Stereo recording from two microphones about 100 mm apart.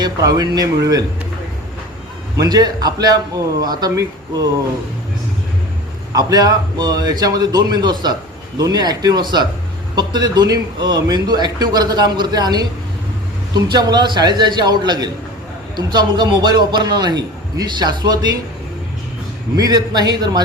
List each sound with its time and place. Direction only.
0.0 s a man's voice: 40° right (ahead or behind)
2.4 s a man's voice: 40° right (ahead or behind)
6.1 s a man's voice: 40° right (ahead or behind)
19.5 s a man's voice: 40° right (ahead or behind)